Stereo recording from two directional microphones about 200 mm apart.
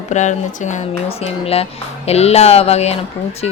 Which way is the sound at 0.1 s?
35° left (ahead or behind).